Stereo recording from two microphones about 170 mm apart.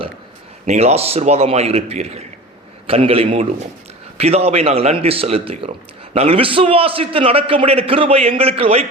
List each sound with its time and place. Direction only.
0.6 s a man's voice: 40° right (ahead or behind)